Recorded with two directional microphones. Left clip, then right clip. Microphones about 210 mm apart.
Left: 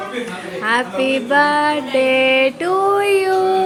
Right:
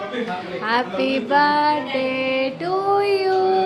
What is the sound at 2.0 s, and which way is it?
Music, 30° left (ahead or behind).